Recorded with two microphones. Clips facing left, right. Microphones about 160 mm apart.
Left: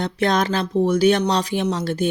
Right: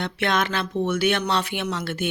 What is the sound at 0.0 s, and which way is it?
Speech, 40° left (ahead or behind).